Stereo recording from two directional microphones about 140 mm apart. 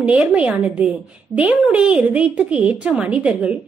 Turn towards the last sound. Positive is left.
turn(degrees=-10)  # may be behind; listen again after turning